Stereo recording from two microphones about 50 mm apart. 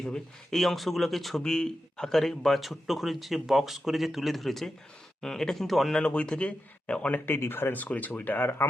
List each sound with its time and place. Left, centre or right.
0.0 s speech: centre
0.6 s speech: centre
5.9 s speech: left
7.3 s speech: left
7.9 s speech: left